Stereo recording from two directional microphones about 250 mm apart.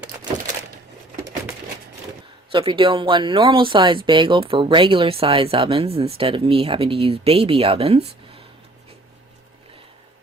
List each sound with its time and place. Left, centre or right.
2.5 s speech: centre